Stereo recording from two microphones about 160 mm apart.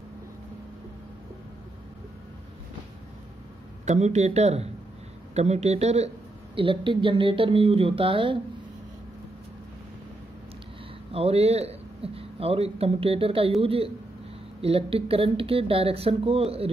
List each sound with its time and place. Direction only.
3.8 s a man's voice: 45° right (ahead or behind)
11.1 s speech: 40° right (ahead or behind)